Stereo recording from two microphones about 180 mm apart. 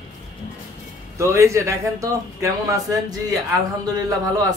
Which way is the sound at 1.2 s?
15° right (ahead or behind).